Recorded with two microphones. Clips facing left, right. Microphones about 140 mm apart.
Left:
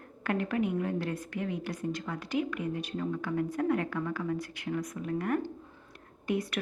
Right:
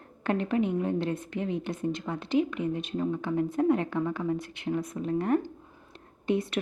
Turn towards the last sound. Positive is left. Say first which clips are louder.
# right 4 dB
turn(degrees=-25)  # may be behind; listen again after turning